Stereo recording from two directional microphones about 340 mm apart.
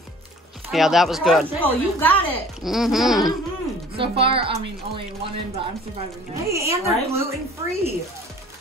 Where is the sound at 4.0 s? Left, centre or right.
Centre.